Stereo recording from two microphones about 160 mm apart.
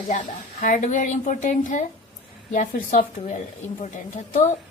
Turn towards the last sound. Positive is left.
turn(degrees=50)  # may be behind; listen again after turning